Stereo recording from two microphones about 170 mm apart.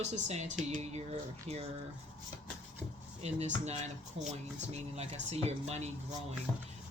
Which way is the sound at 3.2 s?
40° right (ahead or behind).